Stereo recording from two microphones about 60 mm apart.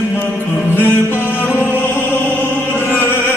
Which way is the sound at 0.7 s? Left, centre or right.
Left.